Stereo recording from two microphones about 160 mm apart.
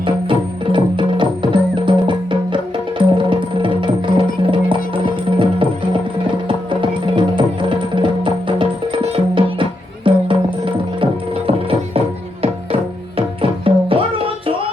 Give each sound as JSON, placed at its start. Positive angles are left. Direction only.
{"t": 0.0, "sound": "music", "side_deg": -30}
{"t": 7.2, "sound": "music", "side_deg": -30}